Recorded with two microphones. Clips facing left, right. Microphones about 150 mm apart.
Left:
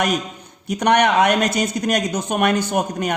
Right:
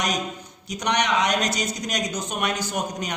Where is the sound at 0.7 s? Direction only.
55° left (ahead or behind).